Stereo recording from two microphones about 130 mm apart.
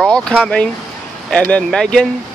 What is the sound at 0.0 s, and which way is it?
Vehicle, 5° left (ahead or behind).